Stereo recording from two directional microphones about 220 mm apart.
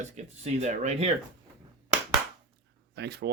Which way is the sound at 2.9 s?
50° right (ahead or behind).